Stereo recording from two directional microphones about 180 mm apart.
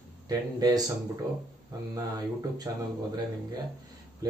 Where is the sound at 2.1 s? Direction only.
20° right (ahead or behind).